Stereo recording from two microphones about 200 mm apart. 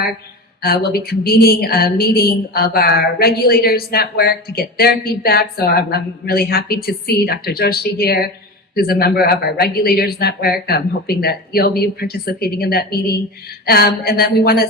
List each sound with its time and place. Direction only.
0.6 s a woman's voice: 50° left (ahead or behind)